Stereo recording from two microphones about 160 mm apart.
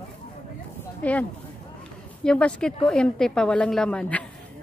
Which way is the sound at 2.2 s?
5° left (ahead or behind).